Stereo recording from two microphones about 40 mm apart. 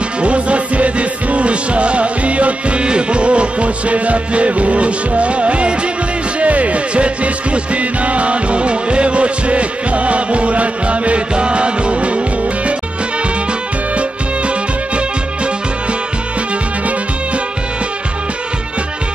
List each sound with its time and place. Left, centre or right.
0.2 s music: right